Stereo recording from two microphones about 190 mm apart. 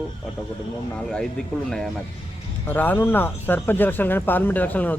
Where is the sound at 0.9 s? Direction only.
5° left (ahead or behind).